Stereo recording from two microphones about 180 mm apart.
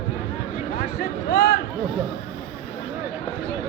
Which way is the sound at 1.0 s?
65° left (ahead or behind).